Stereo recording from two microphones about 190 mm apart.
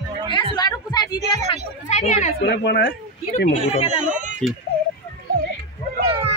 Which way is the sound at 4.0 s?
40° right (ahead or behind).